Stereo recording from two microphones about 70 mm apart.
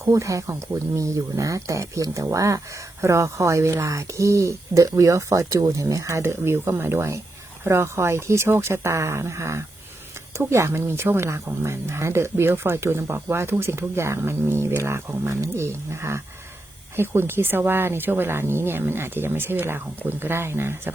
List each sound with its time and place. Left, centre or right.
0.0 s speech: right
6.2 s speech: right